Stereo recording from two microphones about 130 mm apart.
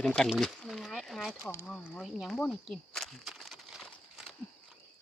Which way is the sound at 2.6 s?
5° left (ahead or behind).